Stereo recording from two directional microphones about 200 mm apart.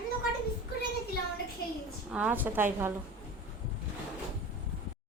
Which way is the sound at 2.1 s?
5° right (ahead or behind).